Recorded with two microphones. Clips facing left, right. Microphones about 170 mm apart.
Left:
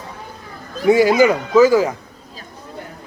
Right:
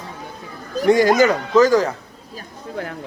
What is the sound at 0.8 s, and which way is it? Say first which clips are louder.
Speech: left 2 dB; 10° left (ahead or behind).